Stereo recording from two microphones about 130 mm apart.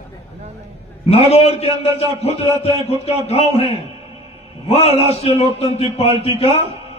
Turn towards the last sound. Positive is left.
turn(degrees=50)  # may be behind; listen again after turning